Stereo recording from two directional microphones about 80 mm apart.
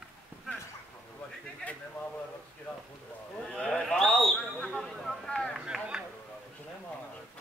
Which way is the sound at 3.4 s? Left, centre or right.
Centre.